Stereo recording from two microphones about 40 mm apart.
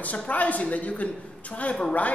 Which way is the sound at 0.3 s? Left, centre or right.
Left.